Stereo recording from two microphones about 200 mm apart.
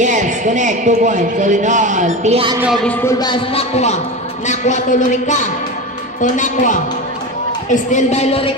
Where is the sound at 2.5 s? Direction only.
5° right (ahead or behind).